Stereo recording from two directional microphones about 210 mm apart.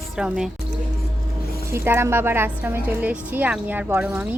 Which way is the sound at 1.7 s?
10° right (ahead or behind).